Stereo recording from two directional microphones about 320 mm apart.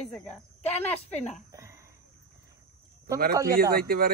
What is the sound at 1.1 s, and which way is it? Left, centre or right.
Speech, left.